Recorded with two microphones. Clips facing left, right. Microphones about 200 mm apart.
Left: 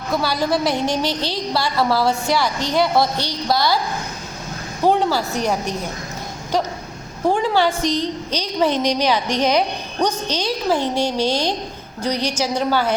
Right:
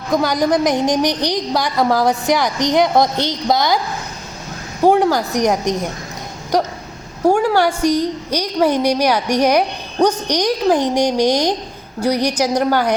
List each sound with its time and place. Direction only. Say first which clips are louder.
0.1 s a woman's voice: right 4 dB; 15° right (ahead or behind)
4.8 s a woman's voice: right 4 dB; 15° right (ahead or behind)
7.4 s a woman's voice: right 3 dB; 15° right (ahead or behind)